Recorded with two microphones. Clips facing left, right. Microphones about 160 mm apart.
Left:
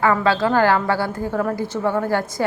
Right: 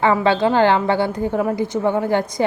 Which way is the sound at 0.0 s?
20° right (ahead or behind).